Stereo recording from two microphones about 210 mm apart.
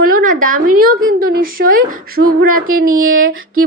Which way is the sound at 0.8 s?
45° right (ahead or behind).